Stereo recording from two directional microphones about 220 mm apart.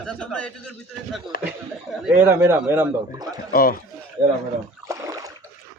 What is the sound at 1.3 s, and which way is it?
Speech, 40° left (ahead or behind).